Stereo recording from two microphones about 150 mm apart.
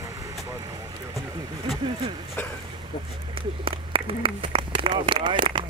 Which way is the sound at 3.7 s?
35° right (ahead or behind).